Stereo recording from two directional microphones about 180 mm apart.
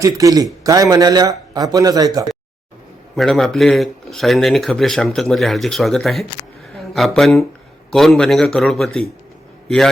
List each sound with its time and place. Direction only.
0.0 s speech: 20° right (ahead or behind)
3.2 s a man's voice: centre (ahead or behind)